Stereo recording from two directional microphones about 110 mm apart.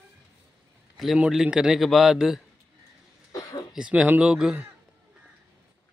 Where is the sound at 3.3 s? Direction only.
30° left (ahead or behind).